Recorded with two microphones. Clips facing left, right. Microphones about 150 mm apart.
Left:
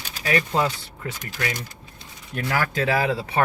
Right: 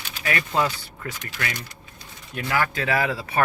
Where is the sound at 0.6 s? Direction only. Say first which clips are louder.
Even; 30° left (ahead or behind).